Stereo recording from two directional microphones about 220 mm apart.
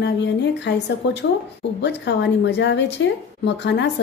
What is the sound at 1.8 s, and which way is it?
A woman's voice, 50° left (ahead or behind).